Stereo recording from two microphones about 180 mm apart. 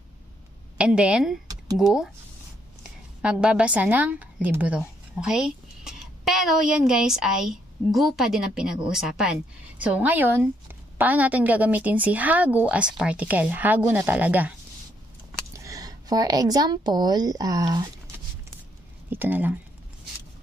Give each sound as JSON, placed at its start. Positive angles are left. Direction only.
{"t": 0.7, "sound": "a woman's voice", "side_deg": -5}
{"t": 3.2, "sound": "a woman's voice", "side_deg": -5}
{"t": 15.5, "sound": "a woman's voice", "side_deg": -20}
{"t": 19.0, "sound": "a woman's voice", "side_deg": -10}